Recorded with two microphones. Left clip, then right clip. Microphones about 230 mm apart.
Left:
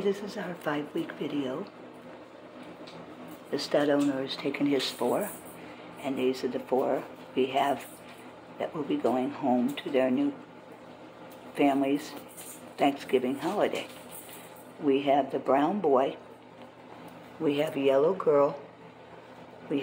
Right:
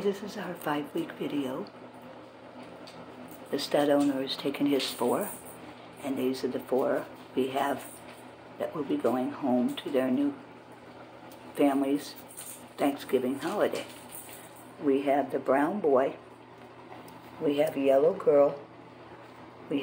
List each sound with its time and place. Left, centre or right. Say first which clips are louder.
0.1 s speech: left 2 dB; centre
3.5 s speech: right 1 dB; centre
11.5 s speech: left 1 dB; centre
14.9 s speech: left 1 dB; centre
17.5 s speech: right 1 dB; centre
19.7 s speech: left 1 dB; centre